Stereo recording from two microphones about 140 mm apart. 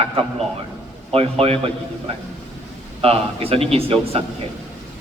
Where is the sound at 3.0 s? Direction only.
45° right (ahead or behind).